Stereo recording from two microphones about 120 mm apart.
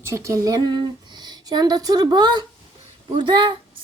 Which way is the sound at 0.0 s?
25° right (ahead or behind).